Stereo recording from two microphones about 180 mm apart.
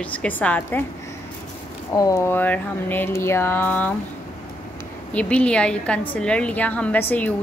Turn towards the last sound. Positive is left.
turn(degrees=10)  # may be behind; listen again after turning